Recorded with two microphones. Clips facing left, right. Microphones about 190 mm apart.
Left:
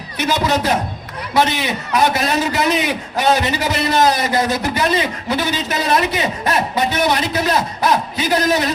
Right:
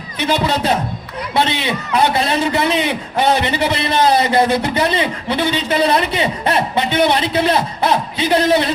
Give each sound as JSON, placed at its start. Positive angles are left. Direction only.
{"t": 0.4, "sound": "a man's voice", "side_deg": -25}